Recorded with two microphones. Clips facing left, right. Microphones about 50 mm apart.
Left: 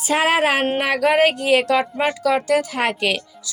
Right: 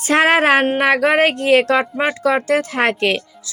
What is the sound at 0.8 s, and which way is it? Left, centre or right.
Speech, right.